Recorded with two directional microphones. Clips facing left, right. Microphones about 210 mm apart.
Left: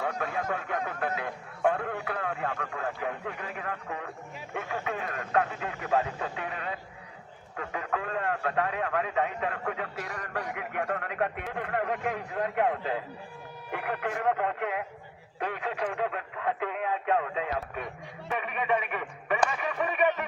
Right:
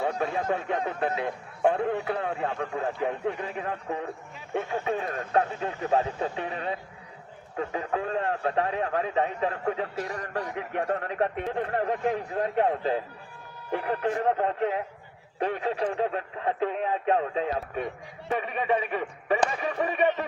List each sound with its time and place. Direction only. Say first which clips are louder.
0.0 s a man's voice: right 4 dB; 30° right (ahead or behind)